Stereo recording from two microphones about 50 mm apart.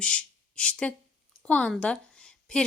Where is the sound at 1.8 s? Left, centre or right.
Centre.